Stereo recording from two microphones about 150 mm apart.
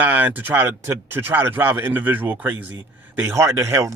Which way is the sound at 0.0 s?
10° right (ahead or behind).